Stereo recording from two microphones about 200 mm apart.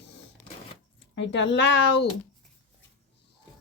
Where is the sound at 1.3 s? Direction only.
60° left (ahead or behind).